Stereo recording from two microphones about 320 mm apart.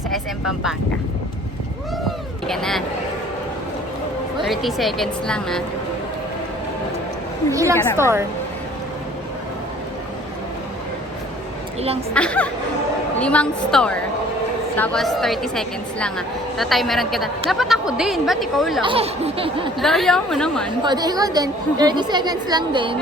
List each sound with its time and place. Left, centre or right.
0.1 s vehicle: centre
2.5 s a woman's voice: centre
4.4 s a woman's voice: centre
7.5 s a woman's voice: centre
12.1 s a woman's voice: centre
18.9 s a woman's voice: centre
19.8 s a woman's voice: centre
20.8 s a woman's voice: centre